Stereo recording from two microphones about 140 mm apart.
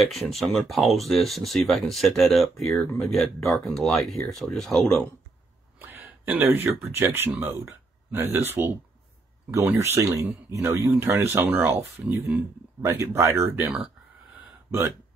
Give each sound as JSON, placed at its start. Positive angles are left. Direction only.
{"t": 0.2, "sound": "speech", "side_deg": 0}
{"t": 5.8, "sound": "a sound", "side_deg": -15}
{"t": 7.0, "sound": "speech", "side_deg": -15}
{"t": 12.8, "sound": "speech", "side_deg": -20}